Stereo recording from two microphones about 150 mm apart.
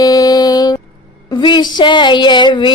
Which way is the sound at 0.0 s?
25° left (ahead or behind).